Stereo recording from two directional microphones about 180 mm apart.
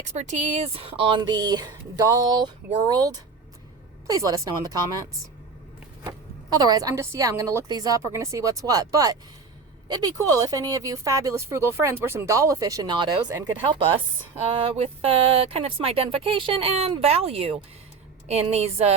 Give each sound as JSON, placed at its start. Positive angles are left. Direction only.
{"t": 0.0, "sound": "speech", "side_deg": -40}
{"t": 6.1, "sound": "speech", "side_deg": -20}
{"t": 14.5, "sound": "speech", "side_deg": -30}